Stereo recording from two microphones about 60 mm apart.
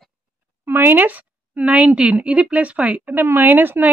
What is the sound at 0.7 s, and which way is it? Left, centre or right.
Speech, right.